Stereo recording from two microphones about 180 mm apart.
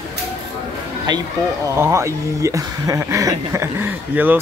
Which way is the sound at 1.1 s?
25° right (ahead or behind).